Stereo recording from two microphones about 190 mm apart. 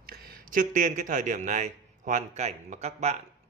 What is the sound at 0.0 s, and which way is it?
A man's voice, 50° right (ahead or behind).